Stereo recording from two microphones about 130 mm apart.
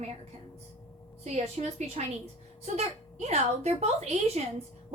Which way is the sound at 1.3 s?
55° right (ahead or behind).